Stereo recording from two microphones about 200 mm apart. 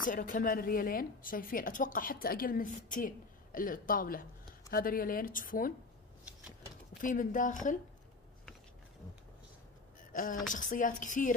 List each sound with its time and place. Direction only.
0.0 s a woman's voice: 40° left (ahead or behind)
7.0 s a woman's voice: 40° left (ahead or behind)
10.5 s a woman's voice: 40° left (ahead or behind)